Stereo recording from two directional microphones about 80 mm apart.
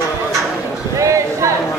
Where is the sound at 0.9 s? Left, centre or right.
Right.